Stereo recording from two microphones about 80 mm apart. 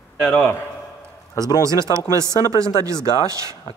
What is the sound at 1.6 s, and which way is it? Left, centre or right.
Speech, right.